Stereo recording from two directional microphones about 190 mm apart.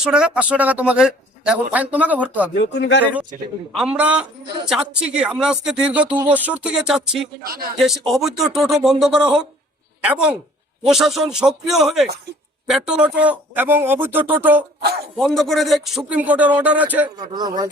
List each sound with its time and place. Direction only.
0.0 s a man's voice: 5° right (ahead or behind)
2.6 s speech: 65° left (ahead or behind)
3.8 s a woman's voice: 5° right (ahead or behind)
7.4 s a man's voice: 50° right (ahead or behind)
7.8 s a woman's voice: centre (ahead or behind)
15.2 s a man's voice: centre (ahead or behind)
17.2 s speech: 20° right (ahead or behind)